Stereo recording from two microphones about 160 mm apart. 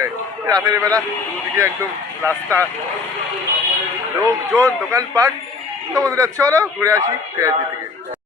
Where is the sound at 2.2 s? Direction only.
15° left (ahead or behind).